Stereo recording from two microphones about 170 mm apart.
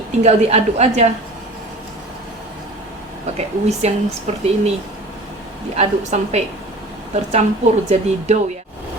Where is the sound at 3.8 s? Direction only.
40° right (ahead or behind).